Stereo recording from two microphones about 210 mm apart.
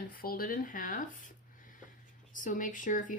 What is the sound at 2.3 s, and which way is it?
Speech, 40° left (ahead or behind).